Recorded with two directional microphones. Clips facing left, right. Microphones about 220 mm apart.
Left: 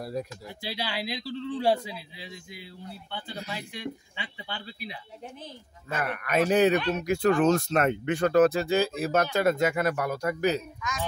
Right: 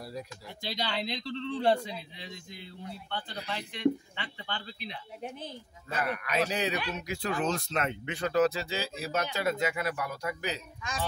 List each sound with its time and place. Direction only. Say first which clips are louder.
0.0 s speech: left 7 dB; 50° left (ahead or behind)
0.6 s speech: even; 5° left (ahead or behind)
5.9 s speech: left 2 dB; 50° left (ahead or behind)